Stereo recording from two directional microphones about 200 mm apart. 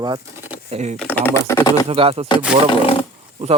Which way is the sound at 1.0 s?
5° left (ahead or behind).